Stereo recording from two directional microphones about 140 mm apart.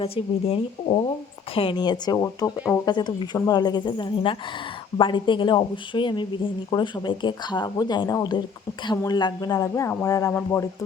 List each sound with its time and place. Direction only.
0.0 s speech: 45° left (ahead or behind); by 10.7 s 20° left (ahead or behind)